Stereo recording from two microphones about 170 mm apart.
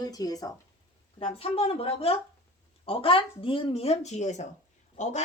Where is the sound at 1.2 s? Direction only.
35° left (ahead or behind).